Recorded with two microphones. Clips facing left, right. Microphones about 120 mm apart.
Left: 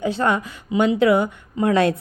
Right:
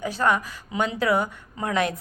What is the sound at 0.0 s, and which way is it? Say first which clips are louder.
Speech: left 3 dB; 25° left (ahead or behind).